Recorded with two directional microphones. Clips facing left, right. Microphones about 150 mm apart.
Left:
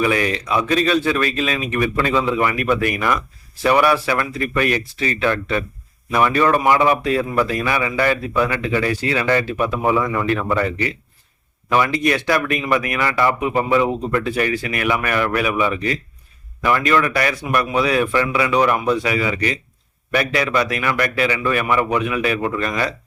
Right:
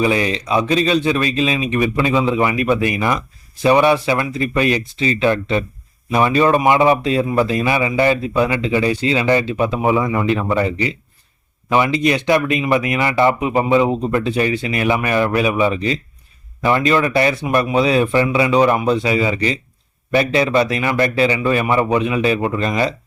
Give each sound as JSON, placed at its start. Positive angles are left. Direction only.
{"t": 0.0, "sound": "speech", "side_deg": -25}